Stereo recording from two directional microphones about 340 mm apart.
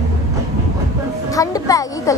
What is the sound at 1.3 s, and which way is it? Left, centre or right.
Speech, centre.